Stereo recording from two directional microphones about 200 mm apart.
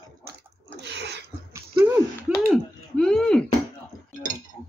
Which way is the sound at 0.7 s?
60° right (ahead or behind).